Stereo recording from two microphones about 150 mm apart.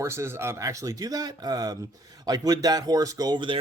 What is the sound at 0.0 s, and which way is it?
Speech, 20° right (ahead or behind).